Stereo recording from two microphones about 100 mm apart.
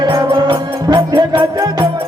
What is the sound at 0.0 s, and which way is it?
Music, 50° right (ahead or behind).